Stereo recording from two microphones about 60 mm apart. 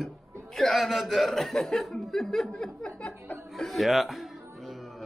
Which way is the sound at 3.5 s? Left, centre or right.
Centre.